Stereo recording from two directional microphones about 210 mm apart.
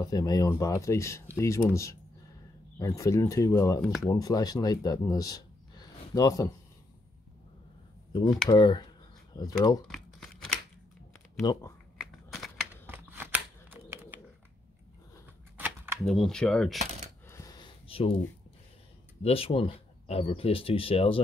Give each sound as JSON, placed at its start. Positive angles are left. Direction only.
{"t": 0.0, "sound": "speech", "side_deg": 20}
{"t": 3.8, "sound": "speech", "side_deg": 0}
{"t": 4.1, "sound": "speech", "side_deg": 15}
{"t": 8.5, "sound": "speech", "side_deg": 20}
{"t": 9.8, "sound": "crumpling", "side_deg": 0}
{"t": 11.4, "sound": "speech", "side_deg": 20}
{"t": 12.0, "sound": "a sound", "side_deg": 0}
{"t": 12.8, "sound": "scissors", "side_deg": -10}
{"t": 15.5, "sound": "typewriter", "side_deg": -5}
{"t": 17.3, "sound": "a sound", "side_deg": 15}
{"t": 19.2, "sound": "speech", "side_deg": 25}